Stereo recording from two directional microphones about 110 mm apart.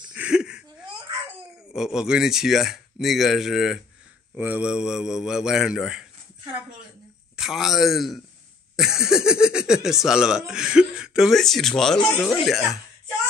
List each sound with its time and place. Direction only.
0.1 s a sound: 10° right (ahead or behind)
0.8 s baby cry: 50° right (ahead or behind)
1.7 s speech: 5° right (ahead or behind)
4.4 s speech: 15° right (ahead or behind)
7.3 s speech: centre (ahead or behind)